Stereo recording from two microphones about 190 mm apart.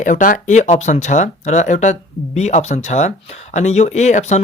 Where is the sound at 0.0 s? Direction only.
45° left (ahead or behind).